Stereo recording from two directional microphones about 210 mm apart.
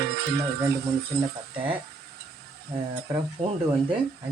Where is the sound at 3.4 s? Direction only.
30° right (ahead or behind).